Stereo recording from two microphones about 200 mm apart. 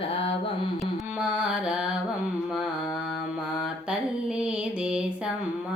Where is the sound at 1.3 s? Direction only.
5° right (ahead or behind).